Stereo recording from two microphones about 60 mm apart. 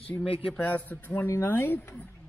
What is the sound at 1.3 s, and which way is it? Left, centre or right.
Speech, left.